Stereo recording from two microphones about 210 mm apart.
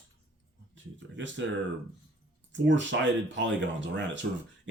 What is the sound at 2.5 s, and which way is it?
Speech, 60° right (ahead or behind).